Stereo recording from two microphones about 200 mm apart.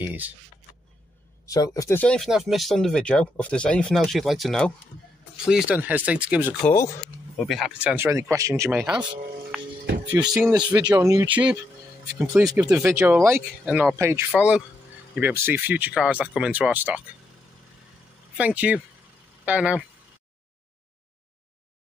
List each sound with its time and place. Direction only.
0.0 s speech: 10° right (ahead or behind)
1.4 s speech: 15° left (ahead or behind); by 6.5 s 5° right (ahead or behind)
6.6 s speech: 15° left (ahead or behind)
7.3 s speech: centre (ahead or behind)
10.4 s speech: 15° right (ahead or behind)
12.4 s speech: 5° right (ahead or behind)
13.9 s speech: 15° right (ahead or behind)
18.4 s speech: 5° right (ahead or behind)